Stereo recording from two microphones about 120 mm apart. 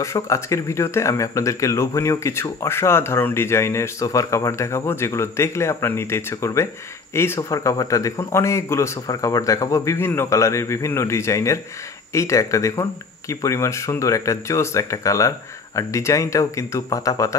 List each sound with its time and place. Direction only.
0.0 s speech: 25° left (ahead or behind)